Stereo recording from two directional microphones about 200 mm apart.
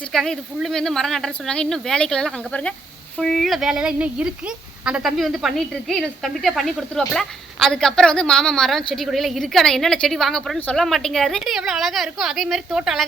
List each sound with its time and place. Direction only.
0.1 s speech: centre (ahead or behind)